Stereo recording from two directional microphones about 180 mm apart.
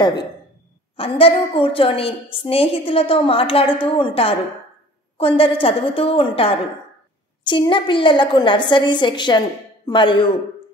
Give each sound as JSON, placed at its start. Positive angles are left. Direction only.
{"t": 0.0, "sound": "a woman's voice", "side_deg": 25}